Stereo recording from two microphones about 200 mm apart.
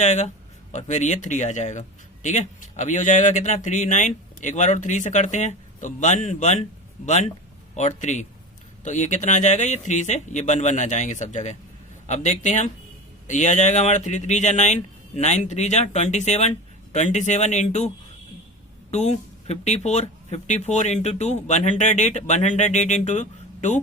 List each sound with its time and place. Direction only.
0.0 s speech: 35° left (ahead or behind)